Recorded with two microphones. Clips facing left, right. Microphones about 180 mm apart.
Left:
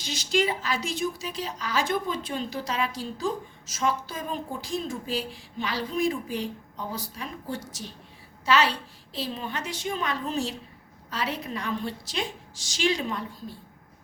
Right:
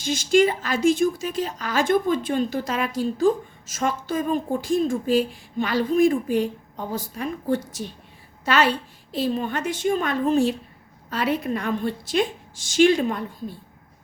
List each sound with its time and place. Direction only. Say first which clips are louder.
0.0 s speech: right 8 dB; 50° right (ahead or behind)